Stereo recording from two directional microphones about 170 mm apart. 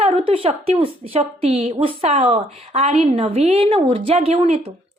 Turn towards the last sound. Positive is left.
turn(degrees=-35)  # may be behind; listen again after turning